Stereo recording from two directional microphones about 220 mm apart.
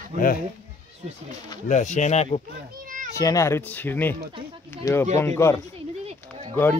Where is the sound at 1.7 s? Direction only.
35° left (ahead or behind).